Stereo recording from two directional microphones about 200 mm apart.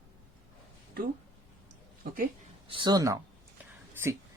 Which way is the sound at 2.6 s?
25° right (ahead or behind).